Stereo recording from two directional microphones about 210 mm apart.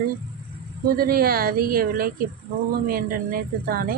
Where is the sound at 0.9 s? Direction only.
45° right (ahead or behind).